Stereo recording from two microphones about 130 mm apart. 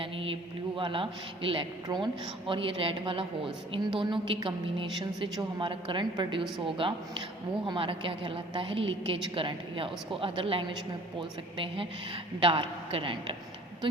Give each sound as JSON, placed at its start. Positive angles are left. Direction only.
{"t": 0.0, "sound": "mantra", "side_deg": -45}
{"t": 0.8, "sound": "a woman's voice", "side_deg": -40}